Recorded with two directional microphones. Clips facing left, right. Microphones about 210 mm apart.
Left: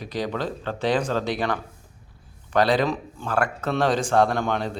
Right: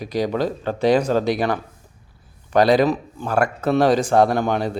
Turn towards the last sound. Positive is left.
turn(degrees=-10)  # may be behind; listen again after turning